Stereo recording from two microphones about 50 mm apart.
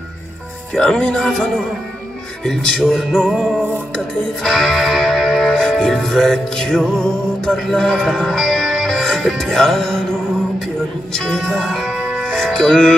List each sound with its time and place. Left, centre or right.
0.7 s music: centre
4.4 s music: centre
8.1 s speech: centre
8.7 s music: centre
11.1 s music: centre
11.4 s music: centre
11.9 s music: centre
12.2 s music: centre